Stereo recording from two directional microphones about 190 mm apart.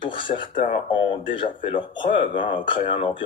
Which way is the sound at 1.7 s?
25° left (ahead or behind).